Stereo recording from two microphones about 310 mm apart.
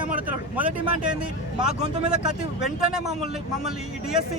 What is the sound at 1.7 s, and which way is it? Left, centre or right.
Speech, right.